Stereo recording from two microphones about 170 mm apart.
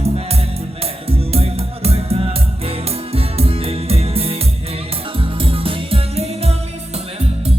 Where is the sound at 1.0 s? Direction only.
35° right (ahead or behind).